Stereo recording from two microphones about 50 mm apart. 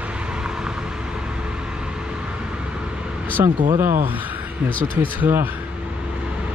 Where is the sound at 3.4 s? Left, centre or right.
Right.